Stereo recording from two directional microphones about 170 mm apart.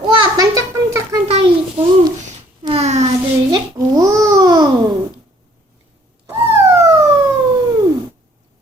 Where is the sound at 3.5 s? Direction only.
20° right (ahead or behind).